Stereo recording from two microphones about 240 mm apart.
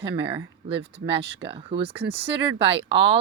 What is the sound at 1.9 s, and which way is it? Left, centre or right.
Speech, right.